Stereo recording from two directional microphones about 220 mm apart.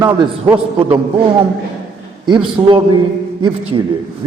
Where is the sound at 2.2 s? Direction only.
20° right (ahead or behind).